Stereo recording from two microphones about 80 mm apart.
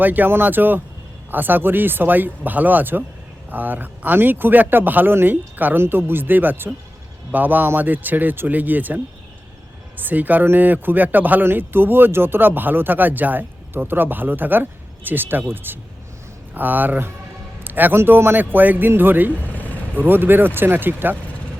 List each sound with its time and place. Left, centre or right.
0.0 s speech: right
10.0 s speech: right